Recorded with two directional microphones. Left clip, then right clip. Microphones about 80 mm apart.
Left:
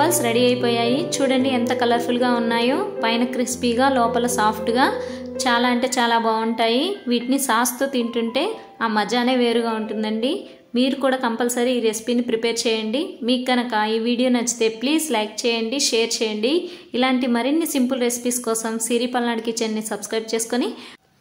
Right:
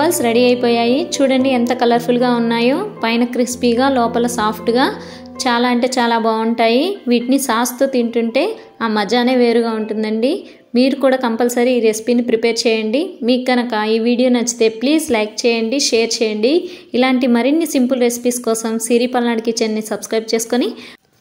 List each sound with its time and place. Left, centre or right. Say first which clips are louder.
0.0 s a woman's voice: right 4 dB; right
16.9 s a woman's voice: right 6 dB; right